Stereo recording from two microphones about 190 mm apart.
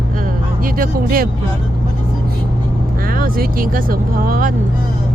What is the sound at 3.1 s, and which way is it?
Speech, 50° right (ahead or behind).